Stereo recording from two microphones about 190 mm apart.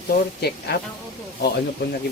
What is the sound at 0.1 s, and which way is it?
Speech, 60° left (ahead or behind).